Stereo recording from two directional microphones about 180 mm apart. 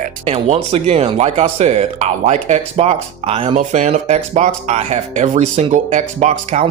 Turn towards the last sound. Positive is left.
turn(degrees=-40)  # may be behind; listen again after turning